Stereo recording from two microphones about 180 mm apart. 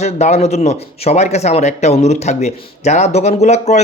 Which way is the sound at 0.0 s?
40° left (ahead or behind).